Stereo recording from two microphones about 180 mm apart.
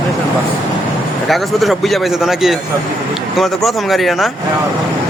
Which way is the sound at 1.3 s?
Centre (ahead or behind).